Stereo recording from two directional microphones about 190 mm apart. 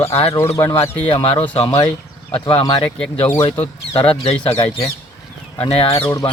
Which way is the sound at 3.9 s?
30° left (ahead or behind).